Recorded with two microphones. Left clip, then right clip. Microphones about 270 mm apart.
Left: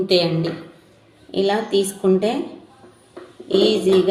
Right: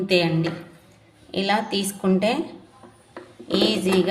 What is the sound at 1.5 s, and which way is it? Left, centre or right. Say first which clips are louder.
Speech: left 1 dB; right.